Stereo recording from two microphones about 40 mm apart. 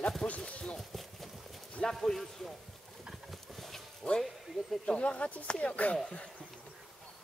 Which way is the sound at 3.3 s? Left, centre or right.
Centre.